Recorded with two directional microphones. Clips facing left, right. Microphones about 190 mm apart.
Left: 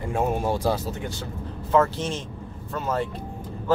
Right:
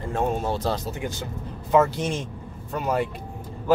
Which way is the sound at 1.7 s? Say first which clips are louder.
Right 1 dB; 15° right (ahead or behind).